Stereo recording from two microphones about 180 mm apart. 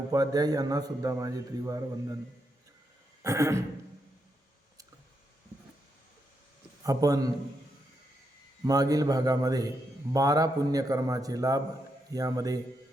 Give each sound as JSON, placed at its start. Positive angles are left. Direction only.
{"t": 0.1, "sound": "a man's voice", "side_deg": -20}
{"t": 3.2, "sound": "neigh", "side_deg": -15}
{"t": 6.8, "sound": "a man's voice", "side_deg": -20}
{"t": 8.6, "sound": "a man's voice", "side_deg": -20}